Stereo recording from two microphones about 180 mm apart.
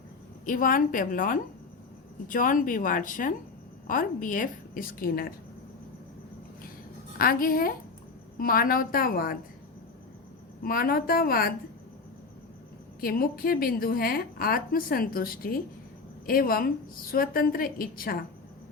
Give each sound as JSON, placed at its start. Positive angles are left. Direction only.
{"t": 0.4, "sound": "a woman's voice", "side_deg": 50}
{"t": 7.2, "sound": "a woman's voice", "side_deg": 55}
{"t": 10.6, "sound": "a woman's voice", "side_deg": 55}
{"t": 13.0, "sound": "a woman's voice", "side_deg": 55}